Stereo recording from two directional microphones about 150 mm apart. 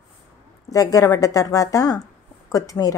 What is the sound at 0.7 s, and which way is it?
A woman's voice, 25° left (ahead or behind).